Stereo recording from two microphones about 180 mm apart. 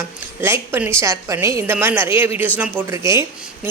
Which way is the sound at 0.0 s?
15° right (ahead or behind).